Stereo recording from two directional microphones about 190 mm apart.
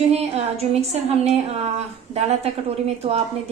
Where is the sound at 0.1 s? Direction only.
35° right (ahead or behind).